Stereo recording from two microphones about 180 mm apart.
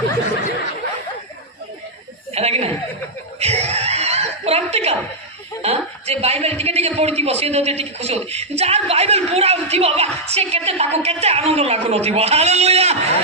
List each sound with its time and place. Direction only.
2.3 s speech: 35° right (ahead or behind)
3.4 s chuckle: 35° right (ahead or behind)
5.6 s a sound: 35° right (ahead or behind)
7.2 s a man's voice: 35° right (ahead or behind)